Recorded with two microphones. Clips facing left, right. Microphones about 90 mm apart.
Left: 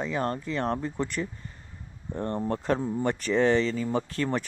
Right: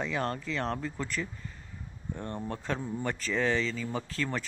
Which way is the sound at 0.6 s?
30° left (ahead or behind).